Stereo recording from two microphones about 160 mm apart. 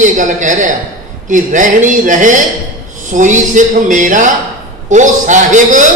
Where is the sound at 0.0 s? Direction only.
50° right (ahead or behind).